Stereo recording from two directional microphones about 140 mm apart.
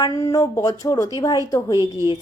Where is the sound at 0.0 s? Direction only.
25° left (ahead or behind).